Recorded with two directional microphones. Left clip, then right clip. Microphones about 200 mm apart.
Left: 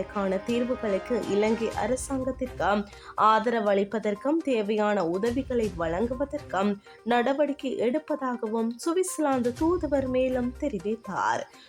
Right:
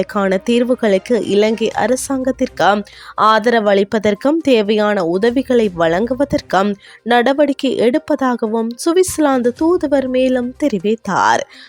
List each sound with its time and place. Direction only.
0.0 s speech: 45° right (ahead or behind)